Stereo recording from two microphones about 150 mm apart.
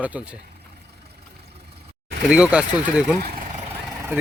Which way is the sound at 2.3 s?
10° right (ahead or behind).